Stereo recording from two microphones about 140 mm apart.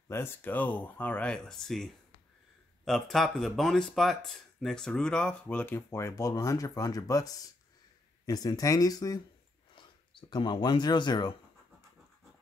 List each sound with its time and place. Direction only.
0.1 s speech: 15° left (ahead or behind)
10.3 s speech: 35° left (ahead or behind)